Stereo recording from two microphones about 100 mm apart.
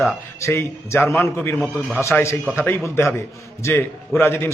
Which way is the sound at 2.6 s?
25° left (ahead or behind).